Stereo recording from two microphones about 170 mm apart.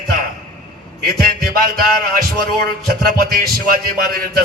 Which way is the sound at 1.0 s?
60° right (ahead or behind).